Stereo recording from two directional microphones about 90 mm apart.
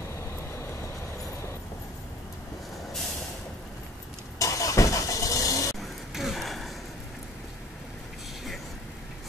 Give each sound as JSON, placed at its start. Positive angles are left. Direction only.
{"t": 0.1, "sound": "vehicle", "side_deg": 35}
{"t": 4.4, "sound": "vehicle", "side_deg": 40}
{"t": 5.8, "sound": "a sound", "side_deg": 0}